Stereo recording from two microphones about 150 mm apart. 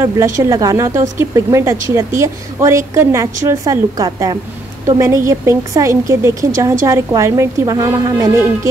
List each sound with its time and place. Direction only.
0.0 s a woman's voice: 20° right (ahead or behind)